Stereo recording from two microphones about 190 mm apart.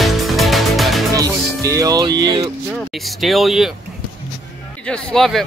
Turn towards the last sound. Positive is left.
turn(degrees=0)  # may be behind; listen again after turning